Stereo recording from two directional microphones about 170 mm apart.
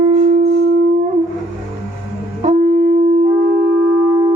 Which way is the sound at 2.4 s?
55° right (ahead or behind).